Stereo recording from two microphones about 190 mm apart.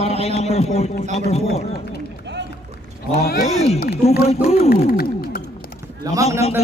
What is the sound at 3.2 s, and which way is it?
Speech, 55° left (ahead or behind).